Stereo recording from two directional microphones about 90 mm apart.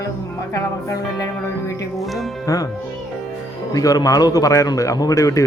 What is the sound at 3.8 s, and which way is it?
A man's voice, 40° left (ahead or behind).